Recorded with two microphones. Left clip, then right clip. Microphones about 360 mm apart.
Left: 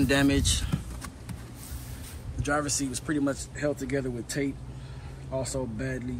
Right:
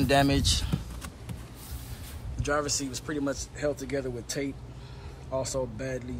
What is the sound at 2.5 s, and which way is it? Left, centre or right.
Speech, centre.